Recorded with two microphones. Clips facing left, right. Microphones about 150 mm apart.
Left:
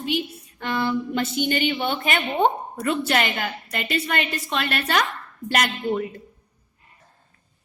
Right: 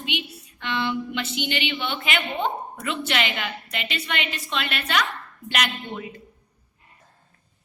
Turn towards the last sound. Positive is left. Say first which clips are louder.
# left 6 dB
turn(degrees=45)  # may be behind; listen again after turning